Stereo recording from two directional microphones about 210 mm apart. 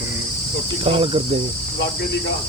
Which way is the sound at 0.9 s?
25° right (ahead or behind).